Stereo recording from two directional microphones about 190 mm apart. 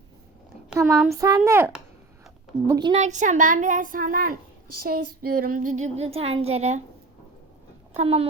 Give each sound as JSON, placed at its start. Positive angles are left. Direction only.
{"t": 0.7, "sound": "a child's voice", "side_deg": -15}
{"t": 2.6, "sound": "a child's voice", "side_deg": -20}
{"t": 3.0, "sound": "a woman's voice", "side_deg": -40}
{"t": 7.9, "sound": "a woman's voice", "side_deg": -30}